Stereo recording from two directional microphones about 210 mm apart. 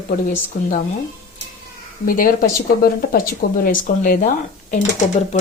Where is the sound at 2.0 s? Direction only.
45° left (ahead or behind).